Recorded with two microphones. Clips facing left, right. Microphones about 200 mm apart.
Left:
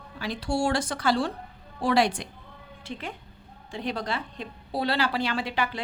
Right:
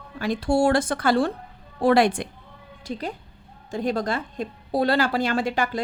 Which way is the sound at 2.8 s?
40° right (ahead or behind).